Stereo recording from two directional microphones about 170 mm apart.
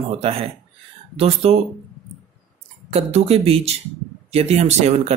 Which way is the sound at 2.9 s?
35° right (ahead or behind).